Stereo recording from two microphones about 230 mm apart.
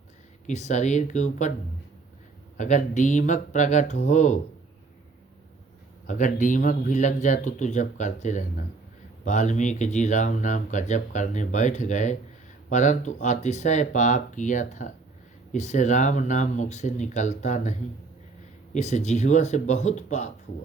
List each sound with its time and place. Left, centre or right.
0.4 s speech: left
2.6 s speech: left
6.1 s speech: left